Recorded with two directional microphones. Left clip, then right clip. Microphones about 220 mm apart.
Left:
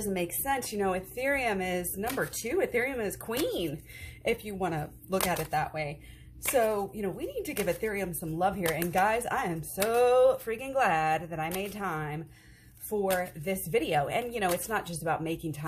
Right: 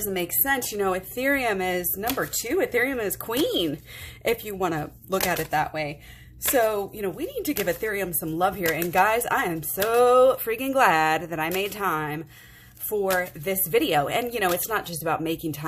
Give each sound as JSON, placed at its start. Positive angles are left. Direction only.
{"t": 0.1, "sound": "speech", "side_deg": -30}